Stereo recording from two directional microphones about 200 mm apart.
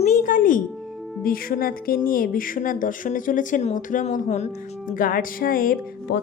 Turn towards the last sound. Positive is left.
turn(degrees=65)  # may be behind; listen again after turning